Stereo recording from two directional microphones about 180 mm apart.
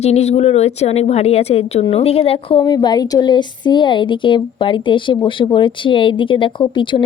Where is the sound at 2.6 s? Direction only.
20° left (ahead or behind).